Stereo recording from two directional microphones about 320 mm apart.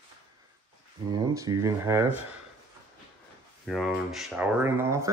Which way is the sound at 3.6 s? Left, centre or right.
Centre.